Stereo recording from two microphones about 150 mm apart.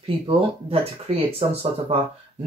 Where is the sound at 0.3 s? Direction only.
40° right (ahead or behind).